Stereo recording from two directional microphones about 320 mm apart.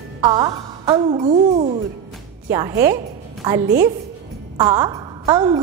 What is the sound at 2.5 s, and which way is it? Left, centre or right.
Speech, centre.